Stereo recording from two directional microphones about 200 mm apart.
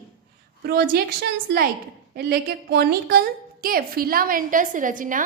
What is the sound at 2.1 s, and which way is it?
A woman's voice, 50° right (ahead or behind).